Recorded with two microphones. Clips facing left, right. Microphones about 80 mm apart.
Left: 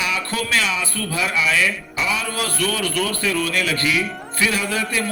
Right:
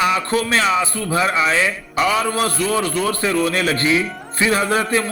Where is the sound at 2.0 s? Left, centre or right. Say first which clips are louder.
Right 7 dB; right.